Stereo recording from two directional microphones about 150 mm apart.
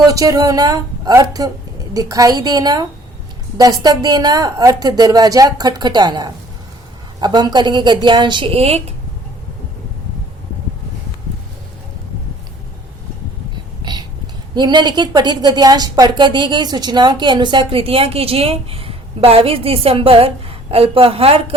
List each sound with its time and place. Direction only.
0.0 s a woman's voice: 25° right (ahead or behind); by 8.8 s 40° right (ahead or behind)
13.8 s a sound: 30° right (ahead or behind)
14.5 s a woman's voice: 30° right (ahead or behind)